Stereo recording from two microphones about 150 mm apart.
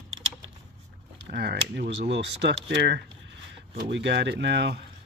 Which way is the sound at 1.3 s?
90° right.